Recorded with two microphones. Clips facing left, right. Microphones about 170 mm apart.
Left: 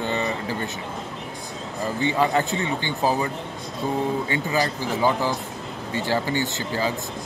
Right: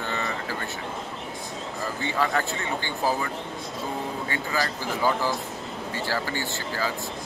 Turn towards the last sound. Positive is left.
turn(degrees=20)  # may be behind; listen again after turning